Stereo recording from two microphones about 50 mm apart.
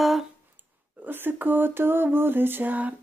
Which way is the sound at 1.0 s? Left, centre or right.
Right.